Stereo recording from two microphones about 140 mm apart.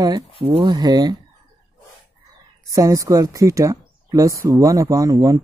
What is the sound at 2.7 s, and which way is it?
Speech, 25° right (ahead or behind).